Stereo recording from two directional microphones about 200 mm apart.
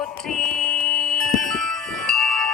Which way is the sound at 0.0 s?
5° left (ahead or behind).